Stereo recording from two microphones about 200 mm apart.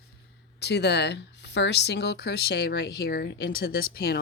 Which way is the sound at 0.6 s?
55° left (ahead or behind).